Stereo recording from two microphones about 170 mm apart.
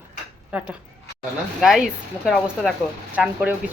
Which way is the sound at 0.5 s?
5° right (ahead or behind).